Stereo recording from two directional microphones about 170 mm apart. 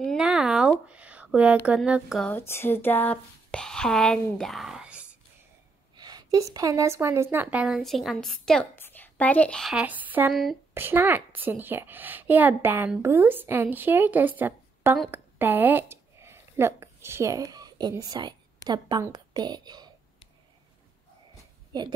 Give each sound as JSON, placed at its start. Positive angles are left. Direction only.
{"t": 0.0, "sound": "a sound", "side_deg": 0}
{"t": 1.7, "sound": "speech", "side_deg": -5}
{"t": 2.2, "sound": "speech", "side_deg": 15}
{"t": 5.9, "sound": "a woman's voice", "side_deg": -25}